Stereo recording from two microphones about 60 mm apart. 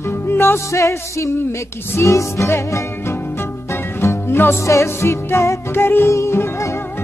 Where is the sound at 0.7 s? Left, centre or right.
Left.